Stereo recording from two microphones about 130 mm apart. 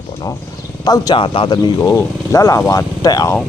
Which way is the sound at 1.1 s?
40° left (ahead or behind).